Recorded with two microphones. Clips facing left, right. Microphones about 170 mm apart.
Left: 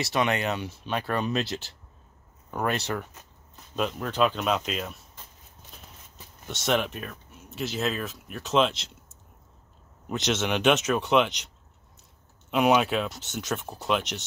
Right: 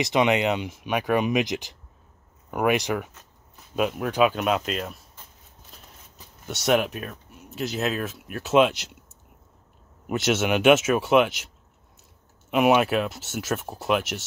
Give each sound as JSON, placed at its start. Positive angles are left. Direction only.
{"t": 0.0, "sound": "speech", "side_deg": -20}
{"t": 6.6, "sound": "speech", "side_deg": -5}
{"t": 10.0, "sound": "speech", "side_deg": -5}
{"t": 12.4, "sound": "speech", "side_deg": -5}